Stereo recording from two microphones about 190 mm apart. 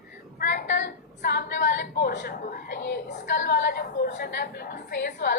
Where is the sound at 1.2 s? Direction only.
60° left (ahead or behind).